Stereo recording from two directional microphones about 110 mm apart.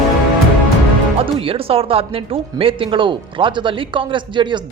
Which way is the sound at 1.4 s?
60° right (ahead or behind).